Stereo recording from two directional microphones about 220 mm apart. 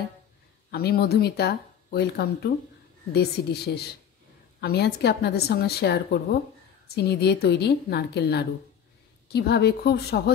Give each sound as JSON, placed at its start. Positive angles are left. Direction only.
{"t": 0.7, "sound": "speech", "side_deg": 45}